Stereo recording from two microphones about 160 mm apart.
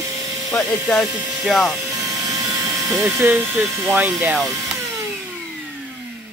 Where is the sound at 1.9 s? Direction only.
20° right (ahead or behind).